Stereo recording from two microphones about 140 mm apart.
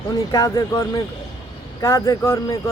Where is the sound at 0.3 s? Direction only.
25° left (ahead or behind).